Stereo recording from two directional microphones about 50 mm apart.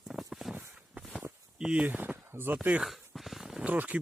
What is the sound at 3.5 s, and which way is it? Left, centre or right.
Speech, right.